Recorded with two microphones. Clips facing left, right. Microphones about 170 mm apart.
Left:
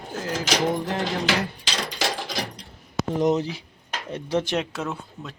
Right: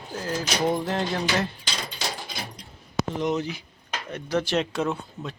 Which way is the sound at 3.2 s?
35° left (ahead or behind).